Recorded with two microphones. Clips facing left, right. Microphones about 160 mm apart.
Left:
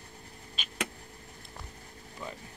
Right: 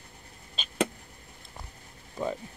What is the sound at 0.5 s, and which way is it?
Vehicle, 30° right (ahead or behind).